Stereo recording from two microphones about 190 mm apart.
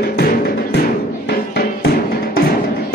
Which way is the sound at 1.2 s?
60° left (ahead or behind).